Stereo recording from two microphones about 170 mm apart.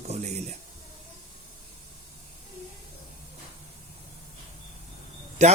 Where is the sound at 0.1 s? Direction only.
40° right (ahead or behind).